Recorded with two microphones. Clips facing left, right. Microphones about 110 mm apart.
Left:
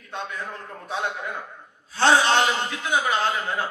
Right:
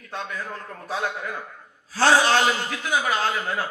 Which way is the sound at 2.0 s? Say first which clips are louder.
Even; 25° left (ahead or behind).